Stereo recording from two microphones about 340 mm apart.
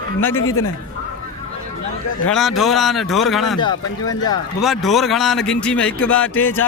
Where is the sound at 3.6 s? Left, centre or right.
Centre.